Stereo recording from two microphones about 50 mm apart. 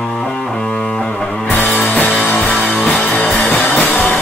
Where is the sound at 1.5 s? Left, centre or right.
Left.